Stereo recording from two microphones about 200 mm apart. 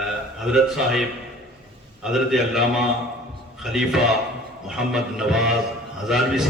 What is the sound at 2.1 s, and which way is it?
A man's voice, centre (ahead or behind).